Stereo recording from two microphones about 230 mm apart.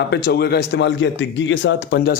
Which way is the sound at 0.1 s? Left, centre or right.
Left.